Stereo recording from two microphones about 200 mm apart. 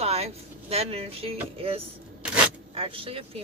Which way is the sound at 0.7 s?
30° right (ahead or behind).